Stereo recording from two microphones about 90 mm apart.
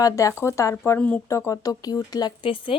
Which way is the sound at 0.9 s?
15° left (ahead or behind).